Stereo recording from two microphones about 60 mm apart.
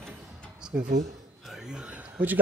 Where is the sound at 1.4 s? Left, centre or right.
Centre.